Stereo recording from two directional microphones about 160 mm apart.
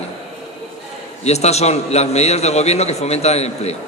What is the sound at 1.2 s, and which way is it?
A man's voice, 40° left (ahead or behind).